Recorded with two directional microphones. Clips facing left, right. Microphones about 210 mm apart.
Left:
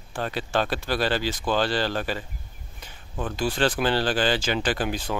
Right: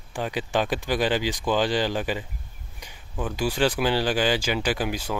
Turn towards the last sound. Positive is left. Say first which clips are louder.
# even
turn(degrees=-10)  # may be behind; listen again after turning